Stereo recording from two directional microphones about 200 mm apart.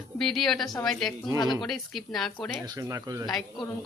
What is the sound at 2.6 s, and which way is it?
Speech, 15° right (ahead or behind).